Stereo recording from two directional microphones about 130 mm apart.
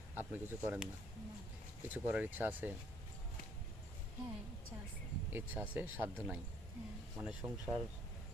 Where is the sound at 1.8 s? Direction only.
10° right (ahead or behind).